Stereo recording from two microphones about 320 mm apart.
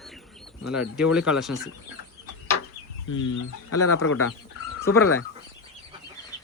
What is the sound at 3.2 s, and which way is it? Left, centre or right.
Speech, left.